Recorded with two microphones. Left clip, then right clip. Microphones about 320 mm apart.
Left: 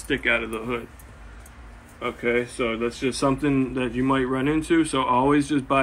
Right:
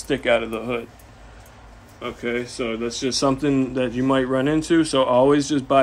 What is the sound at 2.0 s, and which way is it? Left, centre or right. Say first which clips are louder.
Speech: left 2 dB; centre.